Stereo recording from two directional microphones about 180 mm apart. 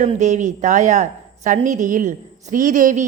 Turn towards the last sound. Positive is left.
turn(degrees=-45)  # may be behind; listen again after turning